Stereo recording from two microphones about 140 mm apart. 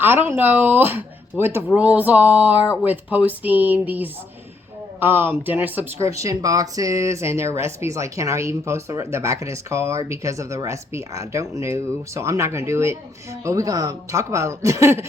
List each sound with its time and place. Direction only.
0.0 s speech: 15° right (ahead or behind)
6.1 s speech: 25° right (ahead or behind)